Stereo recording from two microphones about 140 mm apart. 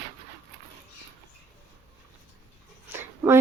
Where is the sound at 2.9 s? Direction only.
20° right (ahead or behind).